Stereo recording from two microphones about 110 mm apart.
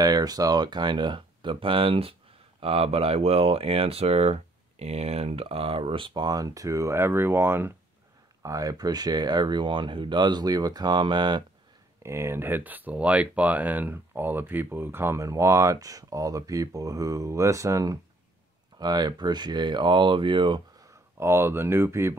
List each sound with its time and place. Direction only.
0.0 s speech: 35° right (ahead or behind)
12.0 s speech: 25° right (ahead or behind)
18.8 s speech: 40° right (ahead or behind)
21.2 s speech: 25° right (ahead or behind)